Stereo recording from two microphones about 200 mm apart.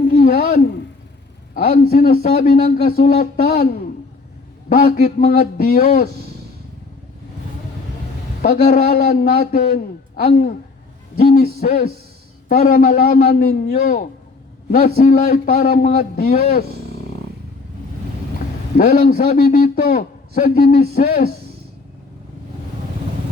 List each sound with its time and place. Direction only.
0.1 s a sound: 45° left (ahead or behind)
1.9 s a man's voice: 45° left (ahead or behind)
8.4 s a man's voice: 45° left (ahead or behind)
11.3 s a man's voice: 50° left (ahead or behind)
18.8 s a man's voice: 45° left (ahead or behind)